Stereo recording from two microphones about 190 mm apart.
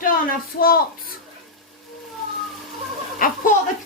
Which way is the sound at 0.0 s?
50° left (ahead or behind).